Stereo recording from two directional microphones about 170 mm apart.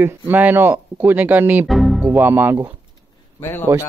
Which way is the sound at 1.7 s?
Centre (ahead or behind).